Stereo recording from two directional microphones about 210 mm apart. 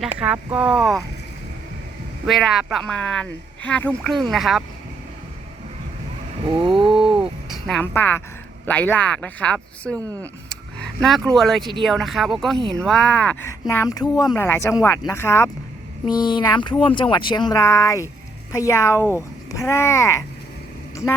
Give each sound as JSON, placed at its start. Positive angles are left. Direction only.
{"t": 0.0, "sound": "speech", "side_deg": -5}
{"t": 2.2, "sound": "speech", "side_deg": 0}
{"t": 6.7, "sound": "a sound", "side_deg": -25}
{"t": 6.9, "sound": "a sound", "side_deg": -5}
{"t": 8.6, "sound": "speech", "side_deg": 10}
{"t": 9.9, "sound": "speech", "side_deg": -15}
{"t": 10.5, "sound": "a sound", "side_deg": 0}
{"t": 11.3, "sound": "speech", "side_deg": 0}
{"t": 12.5, "sound": "speech", "side_deg": -25}
{"t": 12.8, "sound": "speech", "side_deg": 5}
{"t": 20.9, "sound": "vehicle", "side_deg": 15}